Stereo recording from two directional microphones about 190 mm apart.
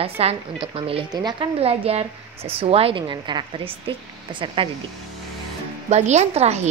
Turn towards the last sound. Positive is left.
turn(degrees=-35)  # may be behind; listen again after turning